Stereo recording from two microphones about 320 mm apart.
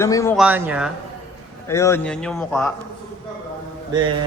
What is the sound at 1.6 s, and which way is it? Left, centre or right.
A man's voice, centre.